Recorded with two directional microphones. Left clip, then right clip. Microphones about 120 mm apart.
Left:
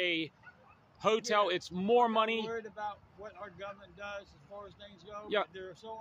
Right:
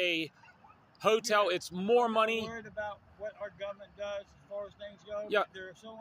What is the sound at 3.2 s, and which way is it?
Speech, 40° left (ahead or behind).